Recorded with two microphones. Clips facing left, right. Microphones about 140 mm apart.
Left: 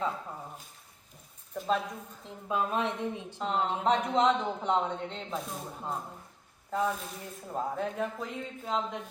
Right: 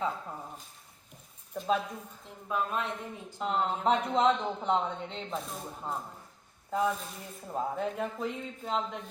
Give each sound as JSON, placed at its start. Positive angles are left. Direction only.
{"t": 1.5, "sound": "a man's voice", "side_deg": 0}
{"t": 2.2, "sound": "speech", "side_deg": 25}
{"t": 3.3, "sound": "a man's voice", "side_deg": 0}